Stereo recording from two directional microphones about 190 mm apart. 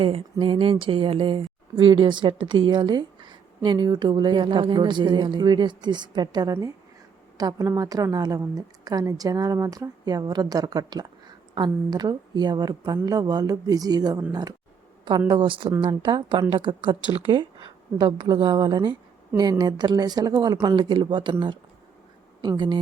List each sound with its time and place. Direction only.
0.0 s speech: 30° right (ahead or behind)
15.3 s a woman's voice: 25° right (ahead or behind)